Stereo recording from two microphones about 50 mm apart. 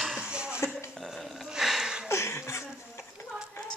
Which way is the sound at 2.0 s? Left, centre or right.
Left.